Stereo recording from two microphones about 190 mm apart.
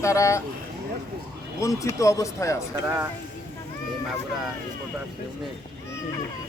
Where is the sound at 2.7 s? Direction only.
15° right (ahead or behind).